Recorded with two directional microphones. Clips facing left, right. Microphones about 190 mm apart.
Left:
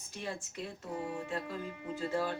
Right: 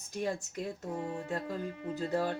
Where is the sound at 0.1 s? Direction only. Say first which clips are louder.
Right 6 dB; 40° right (ahead or behind).